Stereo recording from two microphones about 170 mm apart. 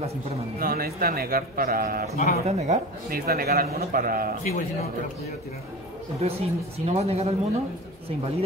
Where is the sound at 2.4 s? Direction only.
40° right (ahead or behind).